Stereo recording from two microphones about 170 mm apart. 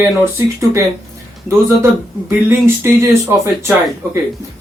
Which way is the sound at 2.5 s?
15° right (ahead or behind).